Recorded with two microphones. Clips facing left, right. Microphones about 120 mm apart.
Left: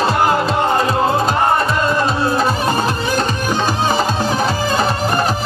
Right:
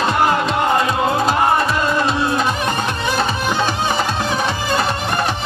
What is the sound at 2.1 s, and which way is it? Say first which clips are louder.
Music: left 2 dB; 35° left (ahead or behind).